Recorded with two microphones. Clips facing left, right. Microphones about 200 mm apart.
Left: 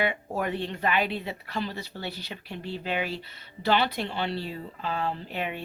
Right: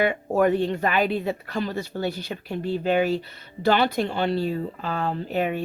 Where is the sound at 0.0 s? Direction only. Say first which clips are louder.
Right 8 dB; 45° right (ahead or behind).